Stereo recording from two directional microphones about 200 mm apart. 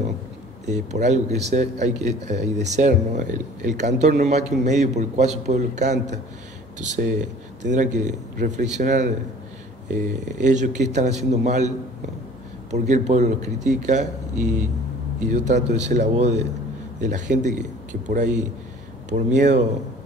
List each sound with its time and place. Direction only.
0.7 s a man's voice: 35° right (ahead or behind)
12.7 s a man's voice: 35° right (ahead or behind)